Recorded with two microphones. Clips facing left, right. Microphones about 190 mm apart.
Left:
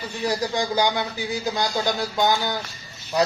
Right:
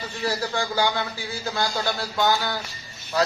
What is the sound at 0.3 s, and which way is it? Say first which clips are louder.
Speech: left 2 dB; 15° left (ahead or behind).